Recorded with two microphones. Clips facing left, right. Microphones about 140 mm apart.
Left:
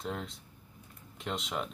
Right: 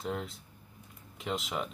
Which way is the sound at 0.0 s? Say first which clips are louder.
Right 2 dB; centre (ahead or behind).